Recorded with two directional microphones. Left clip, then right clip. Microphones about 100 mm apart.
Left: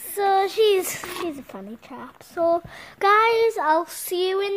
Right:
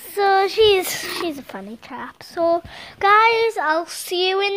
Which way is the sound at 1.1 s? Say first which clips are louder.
Right 4 dB; centre (ahead or behind).